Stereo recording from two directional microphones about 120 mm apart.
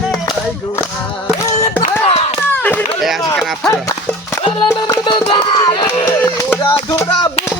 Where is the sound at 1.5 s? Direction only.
70° left (ahead or behind).